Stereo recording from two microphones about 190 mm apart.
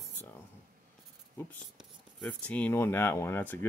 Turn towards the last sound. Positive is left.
turn(degrees=10)  # may be behind; listen again after turning